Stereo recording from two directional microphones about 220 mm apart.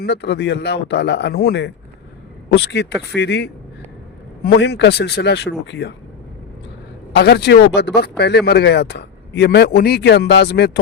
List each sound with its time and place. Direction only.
0.0 s speech: 50° left (ahead or behind)
7.2 s speech: 50° left (ahead or behind)